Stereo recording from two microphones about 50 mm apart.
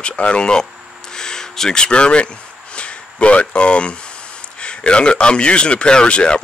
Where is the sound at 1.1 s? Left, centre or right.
Centre.